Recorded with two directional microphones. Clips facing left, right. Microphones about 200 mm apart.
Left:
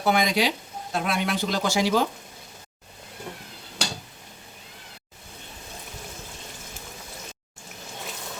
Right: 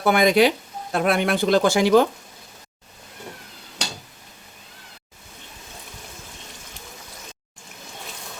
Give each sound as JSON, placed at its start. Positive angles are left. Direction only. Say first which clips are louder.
{"t": 0.0, "sound": "speech", "louder": "right 6 dB", "side_deg": -60}